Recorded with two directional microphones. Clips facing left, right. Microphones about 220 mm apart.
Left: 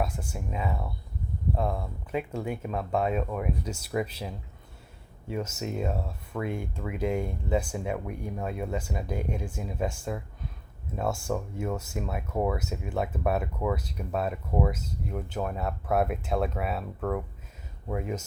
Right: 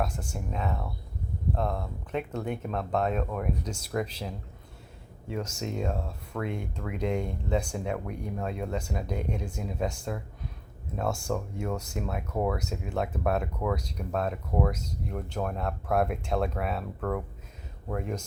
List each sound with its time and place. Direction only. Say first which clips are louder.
0.0 s speech: even; 10° left (ahead or behind)